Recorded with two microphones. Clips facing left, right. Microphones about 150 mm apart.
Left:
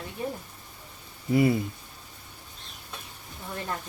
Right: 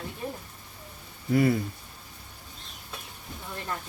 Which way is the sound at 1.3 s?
20° left (ahead or behind).